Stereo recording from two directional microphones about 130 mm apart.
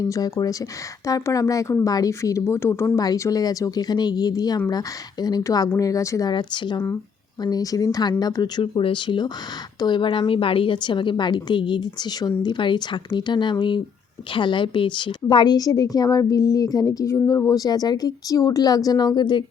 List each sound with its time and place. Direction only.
0.0 s a woman's voice: 30° left (ahead or behind)
6.3 s a woman's voice: 35° left (ahead or behind)
6.7 s a woman's voice: 20° left (ahead or behind); by 19.5 s 35° left (ahead or behind)